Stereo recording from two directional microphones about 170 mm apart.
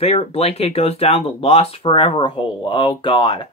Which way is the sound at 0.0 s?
35° left (ahead or behind).